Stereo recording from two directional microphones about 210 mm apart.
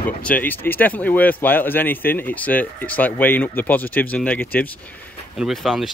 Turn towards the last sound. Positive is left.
turn(degrees=0)  # may be behind; listen again after turning